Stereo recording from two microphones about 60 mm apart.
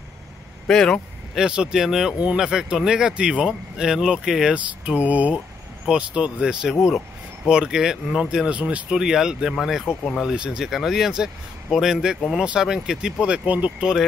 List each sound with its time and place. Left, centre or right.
0.7 s speech: centre
1.3 s speech: centre
4.9 s speech: right
8.9 s speech: centre
10.3 s speech: centre